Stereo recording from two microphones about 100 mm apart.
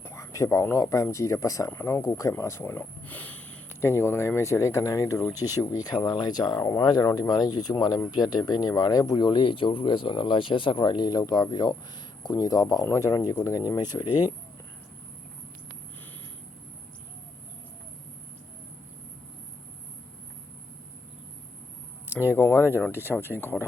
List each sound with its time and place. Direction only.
0.0 s speech: 30° left (ahead or behind)
22.4 s speech: 25° left (ahead or behind)